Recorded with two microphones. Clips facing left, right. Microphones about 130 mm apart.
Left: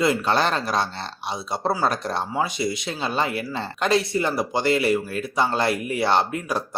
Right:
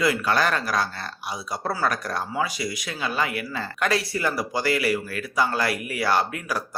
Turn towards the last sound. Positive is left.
turn(degrees=25)  # may be behind; listen again after turning